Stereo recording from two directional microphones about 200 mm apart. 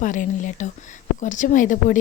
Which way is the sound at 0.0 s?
40° left (ahead or behind).